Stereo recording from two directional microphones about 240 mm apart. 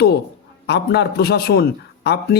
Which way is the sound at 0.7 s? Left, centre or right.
Left.